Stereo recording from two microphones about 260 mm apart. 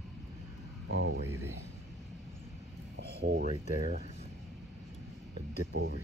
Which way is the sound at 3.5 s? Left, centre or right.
Right.